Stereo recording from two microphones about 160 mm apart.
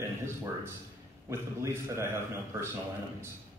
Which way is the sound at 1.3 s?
15° right (ahead or behind).